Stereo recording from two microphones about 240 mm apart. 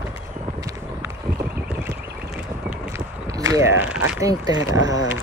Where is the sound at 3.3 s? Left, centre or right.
Centre.